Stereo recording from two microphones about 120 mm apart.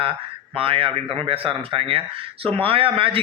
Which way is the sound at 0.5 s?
50° right (ahead or behind).